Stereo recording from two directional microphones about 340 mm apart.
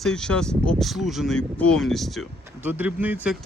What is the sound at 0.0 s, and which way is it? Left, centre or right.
Speech, centre.